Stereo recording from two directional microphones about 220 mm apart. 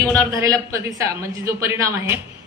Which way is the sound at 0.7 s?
15° right (ahead or behind).